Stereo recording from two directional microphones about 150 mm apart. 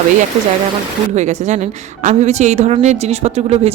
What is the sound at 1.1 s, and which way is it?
A woman's voice, 50° right (ahead or behind).